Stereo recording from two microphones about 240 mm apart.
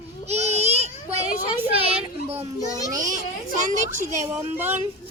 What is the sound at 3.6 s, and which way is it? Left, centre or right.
Speech, right.